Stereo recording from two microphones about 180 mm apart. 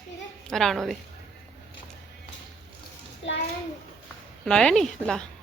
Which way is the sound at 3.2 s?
90° left.